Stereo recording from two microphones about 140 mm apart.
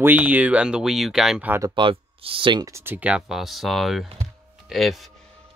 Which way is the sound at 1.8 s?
40° right (ahead or behind).